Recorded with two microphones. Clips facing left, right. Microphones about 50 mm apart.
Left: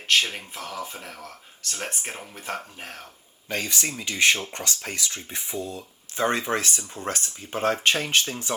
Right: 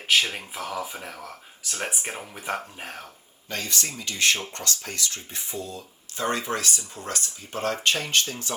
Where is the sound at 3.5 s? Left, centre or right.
Centre.